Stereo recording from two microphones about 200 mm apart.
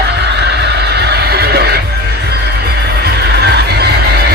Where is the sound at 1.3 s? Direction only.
55° right (ahead or behind).